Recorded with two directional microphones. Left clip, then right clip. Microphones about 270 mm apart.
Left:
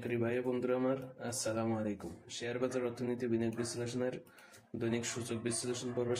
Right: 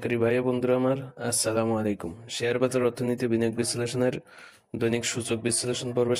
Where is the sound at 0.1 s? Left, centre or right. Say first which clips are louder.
Right 10 dB; right.